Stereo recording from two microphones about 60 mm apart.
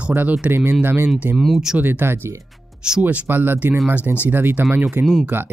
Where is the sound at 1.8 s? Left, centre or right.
Right.